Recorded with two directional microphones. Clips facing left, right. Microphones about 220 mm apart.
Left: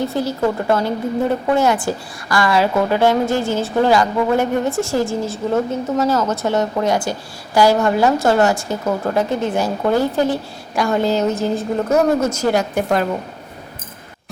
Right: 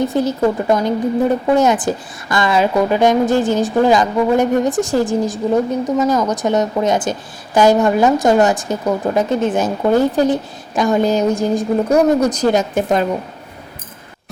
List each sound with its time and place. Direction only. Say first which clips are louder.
0.1 s a woman's voice: right 3 dB; 15° right (ahead or behind)